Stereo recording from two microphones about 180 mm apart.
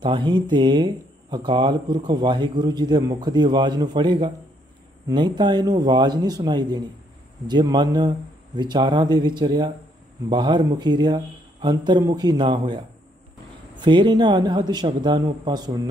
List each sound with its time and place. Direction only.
0.0 s speech: 25° right (ahead or behind)